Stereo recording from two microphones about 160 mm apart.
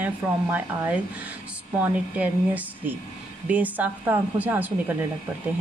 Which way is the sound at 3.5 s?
10° right (ahead or behind).